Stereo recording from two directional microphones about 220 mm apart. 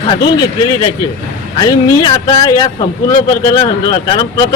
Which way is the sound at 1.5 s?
20° left (ahead or behind).